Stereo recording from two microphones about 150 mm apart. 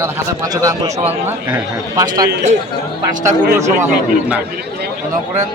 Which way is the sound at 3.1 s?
60° right (ahead or behind).